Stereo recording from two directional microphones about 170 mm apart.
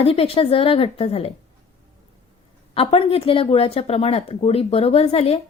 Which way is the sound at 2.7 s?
35° left (ahead or behind).